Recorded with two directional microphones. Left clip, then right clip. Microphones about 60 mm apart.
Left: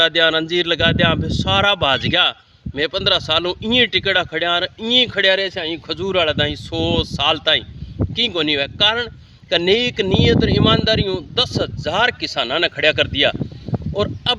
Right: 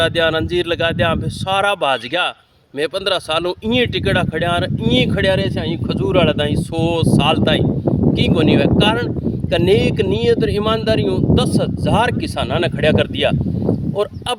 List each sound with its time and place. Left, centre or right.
0.0 s speech: right
5.9 s speech: right